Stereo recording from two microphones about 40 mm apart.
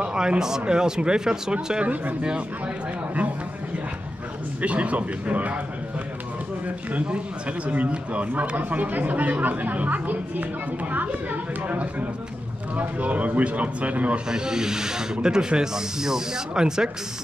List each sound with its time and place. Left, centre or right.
0.0 s speech: right
4.6 s speech: right
7.6 s speech: right
14.3 s speech: centre